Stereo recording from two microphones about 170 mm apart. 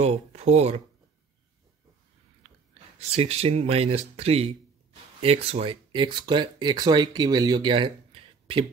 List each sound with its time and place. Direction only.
0.0 s speech: 40° right (ahead or behind)
3.0 s speech: 35° right (ahead or behind)